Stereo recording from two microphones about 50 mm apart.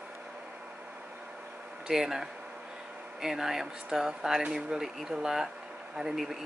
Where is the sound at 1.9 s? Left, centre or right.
Centre.